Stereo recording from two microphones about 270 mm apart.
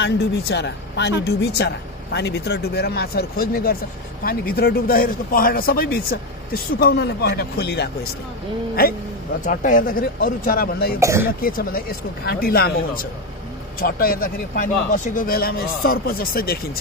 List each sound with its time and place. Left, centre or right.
0.0 s speech: left
9.4 s speech: left
11.0 s speech: centre
11.4 s speech: left